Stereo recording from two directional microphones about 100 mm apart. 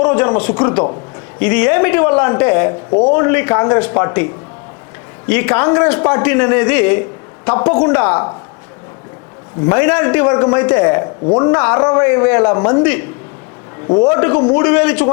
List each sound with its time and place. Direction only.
0.0 s a man's voice: 25° left (ahead or behind)
9.6 s a man's voice: 25° left (ahead or behind)